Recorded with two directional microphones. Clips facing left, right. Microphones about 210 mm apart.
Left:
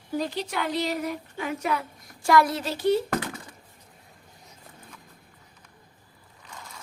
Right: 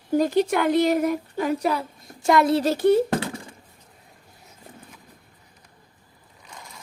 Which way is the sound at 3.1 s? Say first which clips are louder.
Right 4 dB; 30° right (ahead or behind).